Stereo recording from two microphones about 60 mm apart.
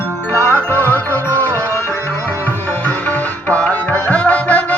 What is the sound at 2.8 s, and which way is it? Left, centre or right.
Music, left.